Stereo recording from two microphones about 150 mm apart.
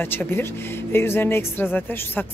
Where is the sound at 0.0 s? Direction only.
15° left (ahead or behind).